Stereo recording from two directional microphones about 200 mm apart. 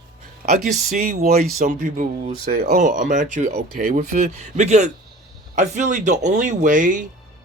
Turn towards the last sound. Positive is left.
turn(degrees=-40)  # may be behind; listen again after turning